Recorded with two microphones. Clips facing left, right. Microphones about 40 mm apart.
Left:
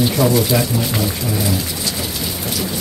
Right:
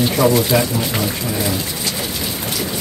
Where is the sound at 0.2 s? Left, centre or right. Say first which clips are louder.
Right 3 dB; centre.